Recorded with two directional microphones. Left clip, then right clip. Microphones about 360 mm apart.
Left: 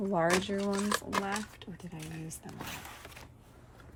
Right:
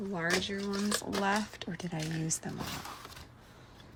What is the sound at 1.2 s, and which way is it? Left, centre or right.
Speech, centre.